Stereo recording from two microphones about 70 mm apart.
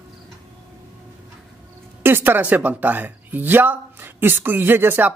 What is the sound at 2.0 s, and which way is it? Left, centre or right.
Speech, right.